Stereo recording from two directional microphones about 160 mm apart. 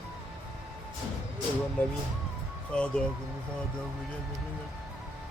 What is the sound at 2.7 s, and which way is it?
Speech, 5° left (ahead or behind).